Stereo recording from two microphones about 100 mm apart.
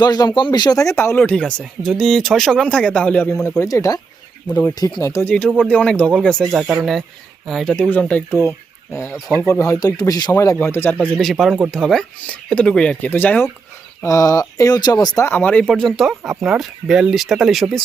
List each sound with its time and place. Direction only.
0.0 s speech: 45° left (ahead or behind); by 3.4 s 5° left (ahead or behind)
3.6 s speech: 35° left (ahead or behind)
4.4 s speech: 20° left (ahead or behind)
4.7 s speech: 40° left (ahead or behind)
5.2 s speech: 15° left (ahead or behind)
7.9 s speech: 15° left (ahead or behind)
8.9 s speech: 30° left (ahead or behind)
10.6 s speech: 25° left (ahead or behind)
11.2 s speech: centre (ahead or behind); by 13.5 s 20° left (ahead or behind)
14.0 s speech: 35° left (ahead or behind)
15.2 s speech: 20° left (ahead or behind)
15.7 s speech: centre (ahead or behind)